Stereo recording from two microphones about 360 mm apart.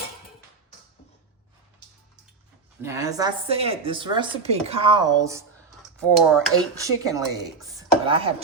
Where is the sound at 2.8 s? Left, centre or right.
Centre.